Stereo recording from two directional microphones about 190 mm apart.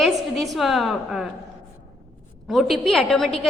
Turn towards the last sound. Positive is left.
turn(degrees=0)  # may be behind; listen again after turning